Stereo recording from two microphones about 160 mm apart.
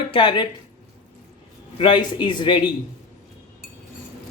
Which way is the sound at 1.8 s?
30° left (ahead or behind).